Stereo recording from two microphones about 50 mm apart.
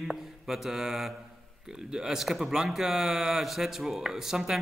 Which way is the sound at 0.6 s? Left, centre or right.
Centre.